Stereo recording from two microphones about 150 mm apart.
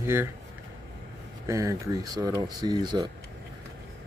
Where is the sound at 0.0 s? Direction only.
15° right (ahead or behind).